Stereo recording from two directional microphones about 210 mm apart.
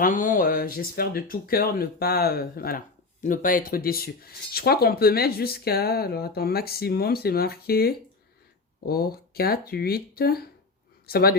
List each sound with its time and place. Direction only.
0.0 s speech: 40° left (ahead or behind)